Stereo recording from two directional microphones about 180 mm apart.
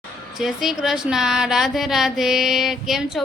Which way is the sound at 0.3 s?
Centre (ahead or behind).